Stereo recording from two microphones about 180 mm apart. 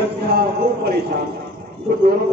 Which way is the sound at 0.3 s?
60° right (ahead or behind).